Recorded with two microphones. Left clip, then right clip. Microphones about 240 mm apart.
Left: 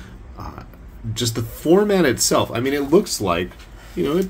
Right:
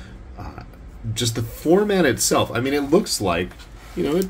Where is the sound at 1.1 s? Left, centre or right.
Centre.